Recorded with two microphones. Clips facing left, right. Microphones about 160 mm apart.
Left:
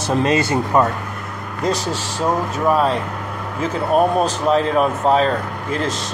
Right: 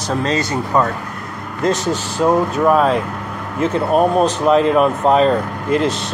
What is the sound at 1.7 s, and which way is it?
Speech, 35° left (ahead or behind).